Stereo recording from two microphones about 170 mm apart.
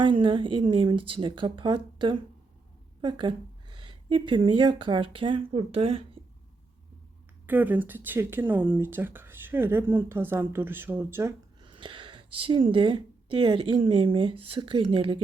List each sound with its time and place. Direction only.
0.0 s speech: 30° right (ahead or behind)
7.4 s speech: 10° right (ahead or behind)
11.6 s speech: 30° right (ahead or behind)